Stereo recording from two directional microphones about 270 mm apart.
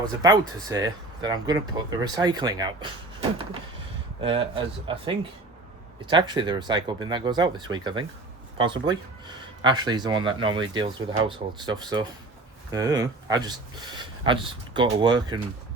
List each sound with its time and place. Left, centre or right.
0.2 s speech: centre